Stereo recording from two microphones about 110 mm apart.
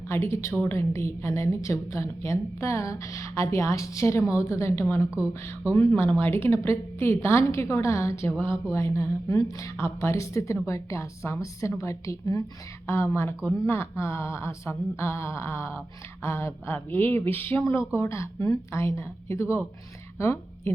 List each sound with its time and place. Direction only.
0.1 s a woman's voice: 25° left (ahead or behind)